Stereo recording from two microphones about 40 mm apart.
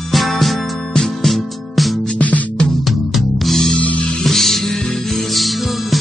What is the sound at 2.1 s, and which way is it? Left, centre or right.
Music, left.